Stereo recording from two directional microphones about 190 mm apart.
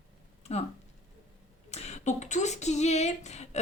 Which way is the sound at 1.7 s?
35° left (ahead or behind).